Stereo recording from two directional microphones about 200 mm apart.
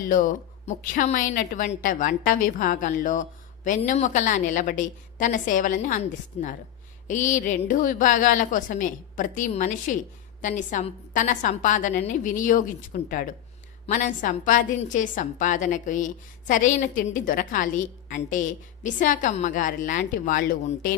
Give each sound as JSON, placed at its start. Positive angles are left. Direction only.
{"t": 0.1, "sound": "a woman's voice", "side_deg": 40}